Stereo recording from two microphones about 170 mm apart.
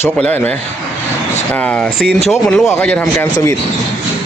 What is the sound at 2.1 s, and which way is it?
Speech, 40° left (ahead or behind).